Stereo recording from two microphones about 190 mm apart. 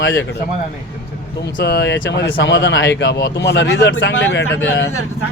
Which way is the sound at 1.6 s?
65° left (ahead or behind).